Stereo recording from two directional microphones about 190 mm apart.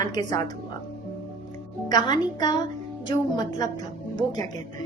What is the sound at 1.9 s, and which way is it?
Speech, 20° left (ahead or behind).